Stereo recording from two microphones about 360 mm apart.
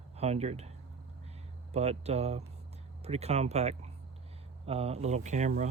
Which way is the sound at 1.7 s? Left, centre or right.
Centre.